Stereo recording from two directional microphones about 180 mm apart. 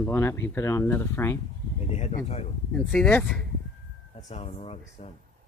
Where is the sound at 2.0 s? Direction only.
40° left (ahead or behind).